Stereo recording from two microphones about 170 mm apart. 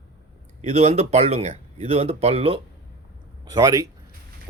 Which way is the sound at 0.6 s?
45° right (ahead or behind).